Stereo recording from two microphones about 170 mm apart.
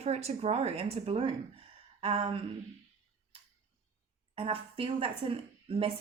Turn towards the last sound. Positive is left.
turn(degrees=-30)  # may be behind; listen again after turning